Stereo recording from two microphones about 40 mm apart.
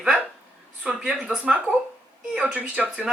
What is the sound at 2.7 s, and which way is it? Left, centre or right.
Speech, right.